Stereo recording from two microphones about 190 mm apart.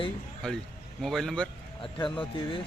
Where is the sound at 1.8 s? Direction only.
25° left (ahead or behind).